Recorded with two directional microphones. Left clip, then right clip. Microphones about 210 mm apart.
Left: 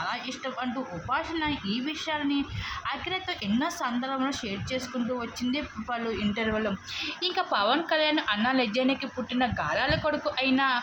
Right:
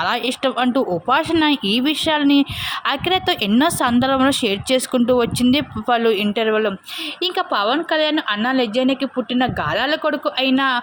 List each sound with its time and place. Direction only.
0.0 s a woman's voice: 50° right (ahead or behind)